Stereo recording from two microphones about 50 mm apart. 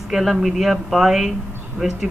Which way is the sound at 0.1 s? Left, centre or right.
Centre.